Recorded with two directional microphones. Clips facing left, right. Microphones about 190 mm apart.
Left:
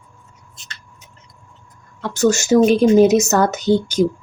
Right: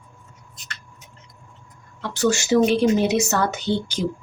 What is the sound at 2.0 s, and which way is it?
A woman's voice, 45° left (ahead or behind).